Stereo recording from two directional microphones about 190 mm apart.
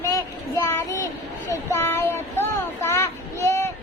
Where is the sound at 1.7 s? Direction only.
10° left (ahead or behind).